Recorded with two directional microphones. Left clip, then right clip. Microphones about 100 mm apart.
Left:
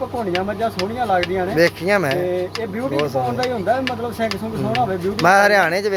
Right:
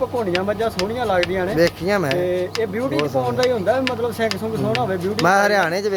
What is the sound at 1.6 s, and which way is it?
Speech, 35° right (ahead or behind).